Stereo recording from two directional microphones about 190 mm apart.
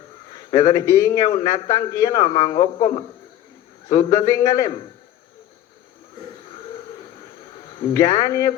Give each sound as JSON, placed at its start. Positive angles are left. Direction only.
{"t": 0.3, "sound": "a man's voice", "side_deg": 20}
{"t": 7.8, "sound": "a man's voice", "side_deg": 15}